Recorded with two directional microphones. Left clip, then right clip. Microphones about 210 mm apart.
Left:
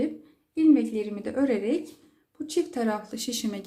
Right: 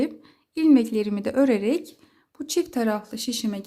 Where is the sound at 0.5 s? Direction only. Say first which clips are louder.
Right 2 dB; 50° right (ahead or behind).